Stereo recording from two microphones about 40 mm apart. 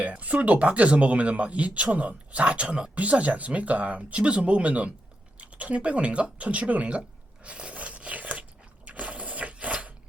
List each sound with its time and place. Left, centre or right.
0.0 s a sound: right
0.4 s speech: right
7.4 s biting: right